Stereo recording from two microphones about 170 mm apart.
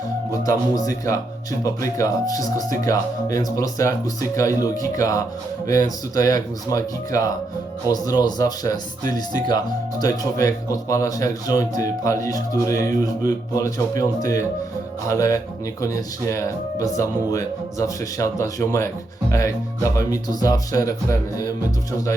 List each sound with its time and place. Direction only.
0.4 s speech: 20° left (ahead or behind)